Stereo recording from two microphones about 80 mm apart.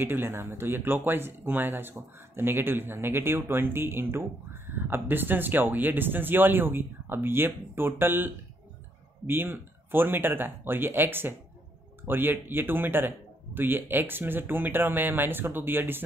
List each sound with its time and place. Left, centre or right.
0.0 s speech: right